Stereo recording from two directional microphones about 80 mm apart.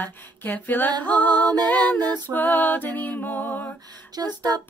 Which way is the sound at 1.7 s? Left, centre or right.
Left.